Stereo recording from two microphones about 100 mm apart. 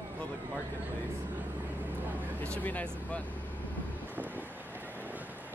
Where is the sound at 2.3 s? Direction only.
15° left (ahead or behind).